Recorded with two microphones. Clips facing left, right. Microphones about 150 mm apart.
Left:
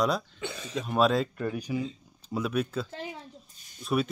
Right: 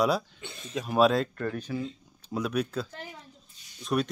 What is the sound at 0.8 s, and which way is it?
Speech, centre (ahead or behind).